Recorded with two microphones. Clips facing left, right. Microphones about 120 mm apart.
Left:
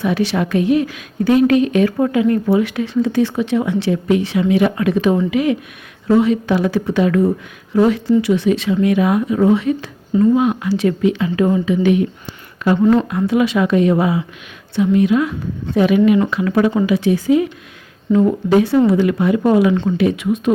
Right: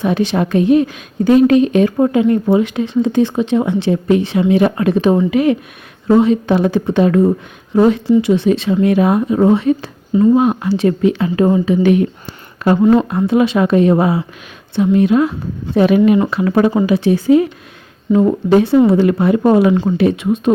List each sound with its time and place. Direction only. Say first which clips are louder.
0.0 s speech: right 2 dB; 25° right (ahead or behind); by 10.7 s 40° right (ahead or behind)
10.7 s speech: right 2 dB; 30° right (ahead or behind)
11.0 s speech: right 2 dB; 40° right (ahead or behind)
13.1 s speech: right 2 dB; 30° right (ahead or behind)